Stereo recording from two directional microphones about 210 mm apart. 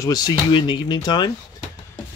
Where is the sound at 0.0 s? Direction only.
20° left (ahead or behind).